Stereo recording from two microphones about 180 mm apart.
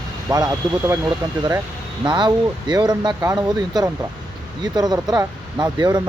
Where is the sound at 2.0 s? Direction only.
25° right (ahead or behind).